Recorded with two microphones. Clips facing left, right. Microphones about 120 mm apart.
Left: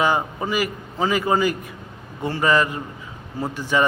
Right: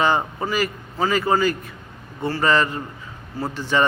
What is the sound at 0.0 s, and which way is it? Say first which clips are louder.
Speech: even; 10° left (ahead or behind).